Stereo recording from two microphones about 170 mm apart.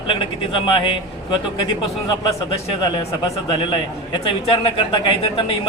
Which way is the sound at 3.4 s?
30° left (ahead or behind).